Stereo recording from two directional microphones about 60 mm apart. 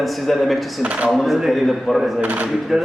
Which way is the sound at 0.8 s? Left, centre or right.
Right.